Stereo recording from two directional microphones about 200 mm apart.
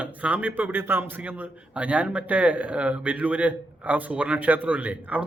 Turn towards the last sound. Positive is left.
turn(degrees=-5)  # may be behind; listen again after turning